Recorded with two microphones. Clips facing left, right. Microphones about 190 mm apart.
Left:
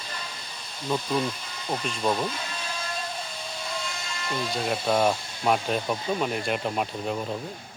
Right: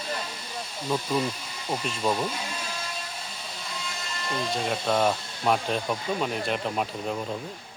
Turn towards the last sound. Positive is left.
turn(degrees=0)  # may be behind; listen again after turning